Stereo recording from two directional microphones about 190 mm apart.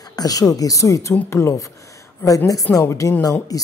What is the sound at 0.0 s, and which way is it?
A woman's voice, 20° left (ahead or behind).